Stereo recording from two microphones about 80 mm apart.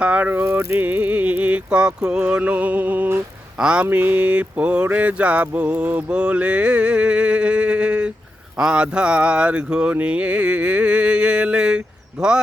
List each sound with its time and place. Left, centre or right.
0.0 s music: centre
3.6 s mantra: centre
3.8 s mantra: right; by 12.3 s centre